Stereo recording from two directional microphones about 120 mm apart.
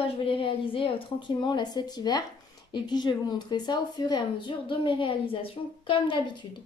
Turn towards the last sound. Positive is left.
turn(degrees=45)  # may be behind; listen again after turning